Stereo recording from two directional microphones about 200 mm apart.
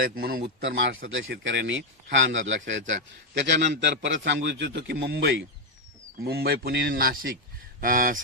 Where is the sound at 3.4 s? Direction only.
60° right (ahead or behind).